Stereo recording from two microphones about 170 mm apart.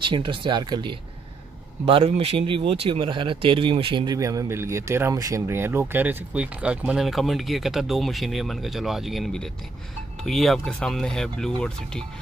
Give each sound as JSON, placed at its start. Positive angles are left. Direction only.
{"t": 0.0, "sound": "speech", "side_deg": -30}